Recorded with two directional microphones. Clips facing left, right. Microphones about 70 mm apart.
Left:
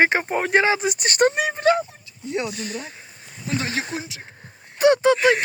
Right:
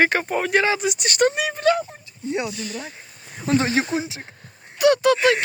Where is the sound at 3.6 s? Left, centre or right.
Right.